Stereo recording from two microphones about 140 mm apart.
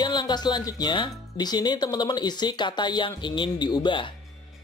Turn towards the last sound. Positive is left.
turn(degrees=35)  # may be behind; listen again after turning